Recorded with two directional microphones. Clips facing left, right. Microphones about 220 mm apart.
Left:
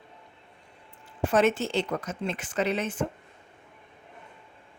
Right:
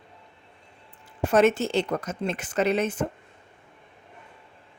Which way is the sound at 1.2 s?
40° right (ahead or behind).